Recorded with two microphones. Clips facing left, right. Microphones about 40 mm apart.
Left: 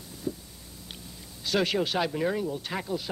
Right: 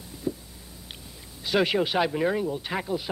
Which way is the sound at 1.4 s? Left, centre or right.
Centre.